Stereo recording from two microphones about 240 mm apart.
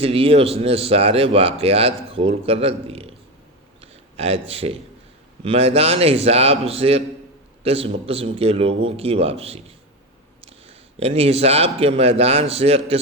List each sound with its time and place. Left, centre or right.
0.0 s speech: right
3.8 s a sound: right
5.4 s speech: right